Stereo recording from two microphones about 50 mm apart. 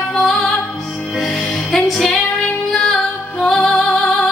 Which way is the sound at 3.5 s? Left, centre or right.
Centre.